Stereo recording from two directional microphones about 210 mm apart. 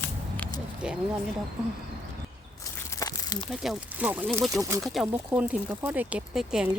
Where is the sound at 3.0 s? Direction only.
20° left (ahead or behind).